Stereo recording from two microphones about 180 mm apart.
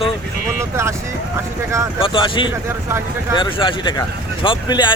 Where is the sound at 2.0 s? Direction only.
30° left (ahead or behind).